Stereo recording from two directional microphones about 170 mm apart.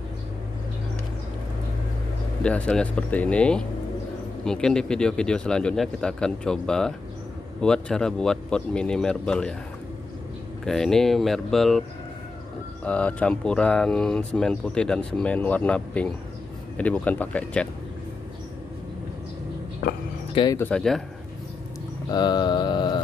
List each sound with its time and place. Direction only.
2.4 s speech: 5° left (ahead or behind)
10.6 s speech: 5° left (ahead or behind)
12.8 s speech: 5° left (ahead or behind)
20.5 s speech: 10° left (ahead or behind)
22.1 s mantra: 25° left (ahead or behind)